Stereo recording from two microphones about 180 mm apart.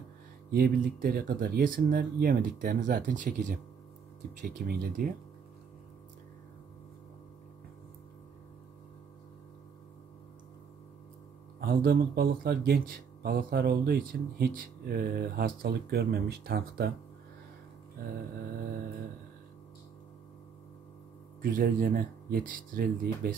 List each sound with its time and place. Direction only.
0.5 s speech: 55° right (ahead or behind)
11.6 s speech: 55° right (ahead or behind)
21.4 s speech: 50° right (ahead or behind)